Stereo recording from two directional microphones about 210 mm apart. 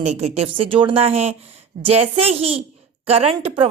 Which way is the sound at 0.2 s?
30° right (ahead or behind).